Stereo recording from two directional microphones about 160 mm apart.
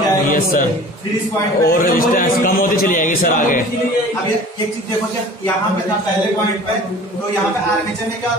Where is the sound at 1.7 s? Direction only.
60° left (ahead or behind).